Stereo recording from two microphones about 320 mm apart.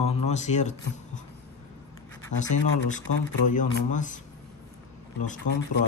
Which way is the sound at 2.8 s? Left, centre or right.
Left.